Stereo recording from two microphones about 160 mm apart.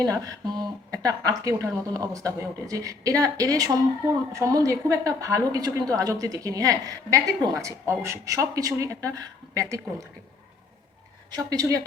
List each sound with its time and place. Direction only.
0.0 s a woman's voice: 20° right (ahead or behind)
11.3 s a woman's voice: 25° right (ahead or behind)